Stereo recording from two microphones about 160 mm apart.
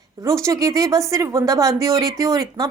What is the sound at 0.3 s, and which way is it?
A woman's voice, 20° right (ahead or behind).